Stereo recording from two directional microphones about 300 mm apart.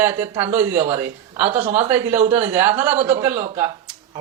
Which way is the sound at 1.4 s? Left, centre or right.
Right.